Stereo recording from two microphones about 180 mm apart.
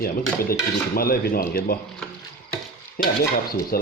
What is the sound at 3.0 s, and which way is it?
Stir, 50° left (ahead or behind).